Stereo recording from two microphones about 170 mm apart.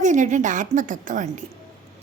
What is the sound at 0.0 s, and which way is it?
A woman's voice, 45° right (ahead or behind).